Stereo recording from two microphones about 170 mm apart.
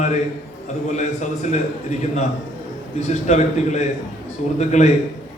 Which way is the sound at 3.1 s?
40° left (ahead or behind).